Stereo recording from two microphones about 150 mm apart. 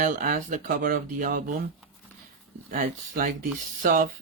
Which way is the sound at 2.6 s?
65° right (ahead or behind).